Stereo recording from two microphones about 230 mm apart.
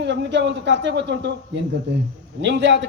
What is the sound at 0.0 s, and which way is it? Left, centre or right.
Speech, right.